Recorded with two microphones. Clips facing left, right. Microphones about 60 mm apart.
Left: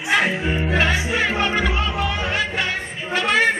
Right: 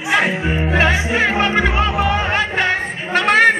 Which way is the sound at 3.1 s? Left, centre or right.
Right.